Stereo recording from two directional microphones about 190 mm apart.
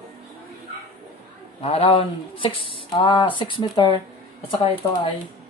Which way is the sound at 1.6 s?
30° left (ahead or behind).